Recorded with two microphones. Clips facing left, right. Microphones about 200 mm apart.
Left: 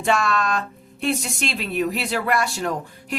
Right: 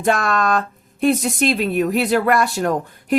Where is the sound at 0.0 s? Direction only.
45° right (ahead or behind).